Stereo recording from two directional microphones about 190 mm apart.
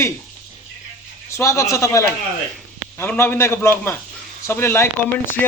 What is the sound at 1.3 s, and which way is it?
Speech, 15° left (ahead or behind).